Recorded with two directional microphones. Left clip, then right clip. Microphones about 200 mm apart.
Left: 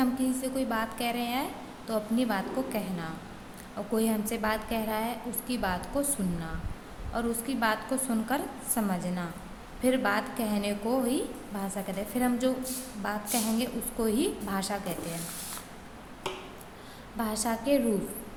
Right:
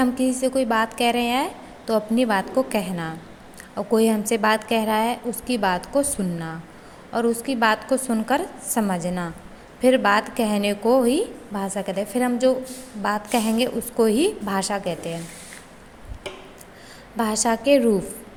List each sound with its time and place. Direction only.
0.0 s a woman's voice: 35° right (ahead or behind)
17.2 s a woman's voice: 35° right (ahead or behind)